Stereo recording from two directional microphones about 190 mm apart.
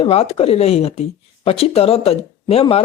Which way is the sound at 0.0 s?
30° left (ahead or behind).